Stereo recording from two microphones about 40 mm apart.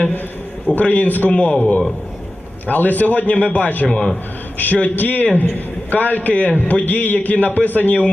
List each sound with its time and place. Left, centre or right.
0.8 s a man's voice: left
2.6 s a man's voice: left
3.8 s a man's voice: centre
4.5 s a man's voice: left